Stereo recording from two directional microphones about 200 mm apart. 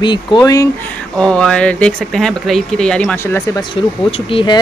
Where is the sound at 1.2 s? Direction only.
5° left (ahead or behind).